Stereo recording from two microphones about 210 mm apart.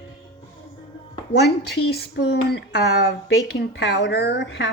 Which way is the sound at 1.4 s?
50° left (ahead or behind).